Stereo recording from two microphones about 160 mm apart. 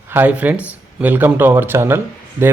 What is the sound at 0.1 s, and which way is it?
Speech, 10° right (ahead or behind).